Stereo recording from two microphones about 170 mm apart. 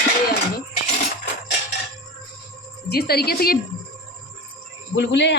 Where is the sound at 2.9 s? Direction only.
70° left (ahead or behind).